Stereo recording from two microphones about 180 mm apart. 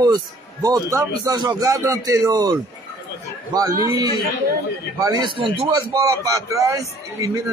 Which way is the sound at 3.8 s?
20° right (ahead or behind).